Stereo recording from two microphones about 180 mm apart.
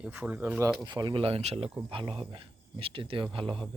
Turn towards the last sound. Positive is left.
turn(degrees=-30)  # may be behind; listen again after turning